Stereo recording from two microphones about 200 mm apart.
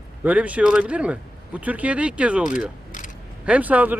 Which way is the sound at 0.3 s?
5° right (ahead or behind).